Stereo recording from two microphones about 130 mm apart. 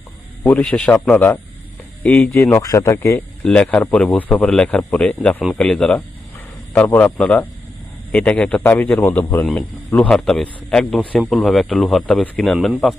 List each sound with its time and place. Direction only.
0.4 s a man's voice: 10° left (ahead or behind)
3.4 s a man's voice: 10° left (ahead or behind)